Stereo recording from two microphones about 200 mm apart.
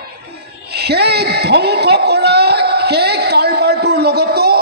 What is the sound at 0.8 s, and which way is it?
A man's voice, 55° right (ahead or behind).